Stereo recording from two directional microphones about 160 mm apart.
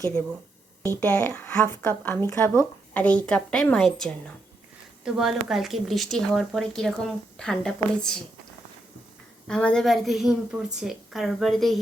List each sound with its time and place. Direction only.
0.8 s a woman's voice: 10° left (ahead or behind)
9.5 s speech: 5° left (ahead or behind)